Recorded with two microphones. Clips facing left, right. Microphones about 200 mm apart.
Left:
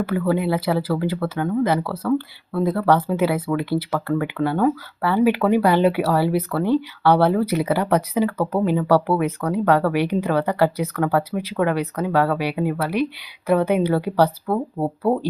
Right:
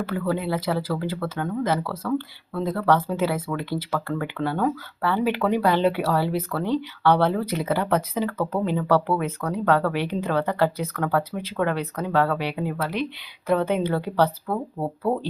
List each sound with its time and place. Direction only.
0.1 s speech: 10° left (ahead or behind)
14.4 s speech: 30° left (ahead or behind)